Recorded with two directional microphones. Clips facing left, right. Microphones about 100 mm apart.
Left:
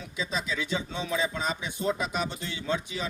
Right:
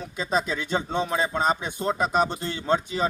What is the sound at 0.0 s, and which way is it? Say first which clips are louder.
Speech: right 7 dB; 45° right (ahead or behind).